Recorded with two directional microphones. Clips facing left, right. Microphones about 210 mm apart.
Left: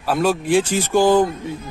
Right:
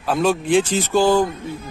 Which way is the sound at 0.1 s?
5° left (ahead or behind).